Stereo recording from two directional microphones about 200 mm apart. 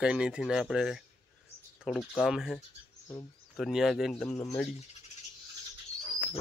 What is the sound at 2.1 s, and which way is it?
Speech, centre (ahead or behind).